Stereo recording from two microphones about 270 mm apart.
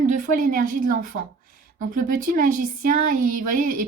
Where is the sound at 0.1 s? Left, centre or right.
Right.